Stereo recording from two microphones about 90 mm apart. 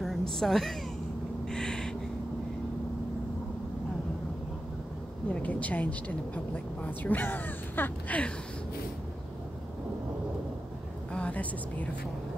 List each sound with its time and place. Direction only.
0.0 s a sound: centre (ahead or behind)
5.3 s a woman's voice: 15° left (ahead or behind)
11.1 s speech: 15° left (ahead or behind)